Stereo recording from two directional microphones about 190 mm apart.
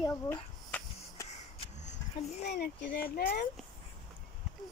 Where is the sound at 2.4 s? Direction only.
60° left (ahead or behind).